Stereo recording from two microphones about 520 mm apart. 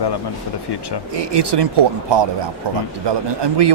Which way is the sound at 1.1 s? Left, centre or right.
Right.